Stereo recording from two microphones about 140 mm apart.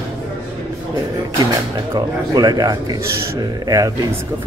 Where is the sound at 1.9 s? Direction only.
25° right (ahead or behind).